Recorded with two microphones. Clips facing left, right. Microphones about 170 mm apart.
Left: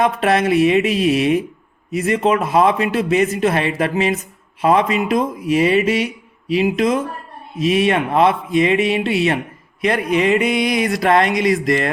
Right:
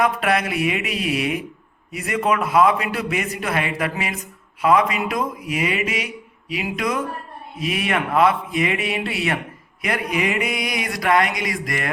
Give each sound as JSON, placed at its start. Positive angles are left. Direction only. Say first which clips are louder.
{"t": 0.0, "sound": "a man's voice", "louder": "left 4 dB", "side_deg": 30}